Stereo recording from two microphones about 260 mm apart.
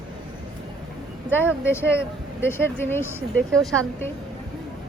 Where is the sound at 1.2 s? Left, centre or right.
Centre.